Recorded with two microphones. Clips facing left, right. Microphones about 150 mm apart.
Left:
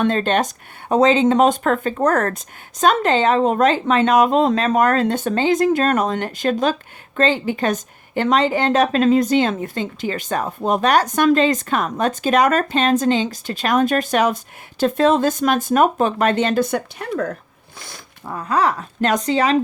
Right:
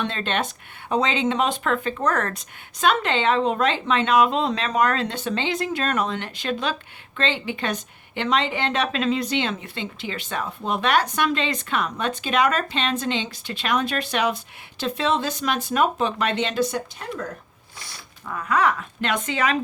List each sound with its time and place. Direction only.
0.0 s a woman's voice: 45° left (ahead or behind)
18.3 s speech: 35° left (ahead or behind)